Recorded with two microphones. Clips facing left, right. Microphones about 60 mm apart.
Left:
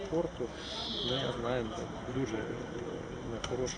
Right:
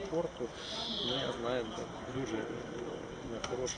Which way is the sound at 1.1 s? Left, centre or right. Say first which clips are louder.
Left 1 dB; centre.